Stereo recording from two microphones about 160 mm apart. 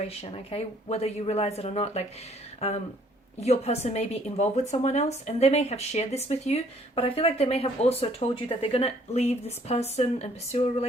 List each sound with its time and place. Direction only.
0.0 s a woman's voice: 40° left (ahead or behind)